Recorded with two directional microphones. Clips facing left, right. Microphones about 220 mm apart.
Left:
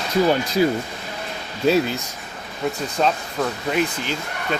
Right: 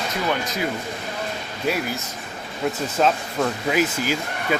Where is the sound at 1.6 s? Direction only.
25° left (ahead or behind).